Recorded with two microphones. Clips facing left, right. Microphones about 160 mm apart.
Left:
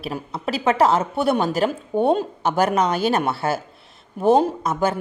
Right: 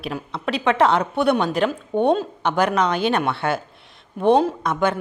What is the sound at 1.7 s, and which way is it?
Speech, 5° left (ahead or behind).